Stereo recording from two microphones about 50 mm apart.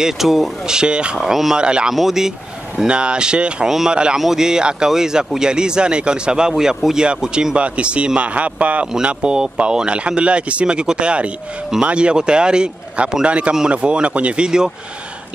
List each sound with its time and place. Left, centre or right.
0.0 s speech: centre
1.6 s speech: centre
2.0 s speech: centre
2.9 s speech: centre
3.6 s speech: centre; by 8.8 s right
9.0 s speech: centre